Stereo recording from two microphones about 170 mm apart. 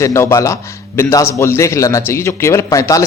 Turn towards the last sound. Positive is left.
turn(degrees=20)  # may be behind; listen again after turning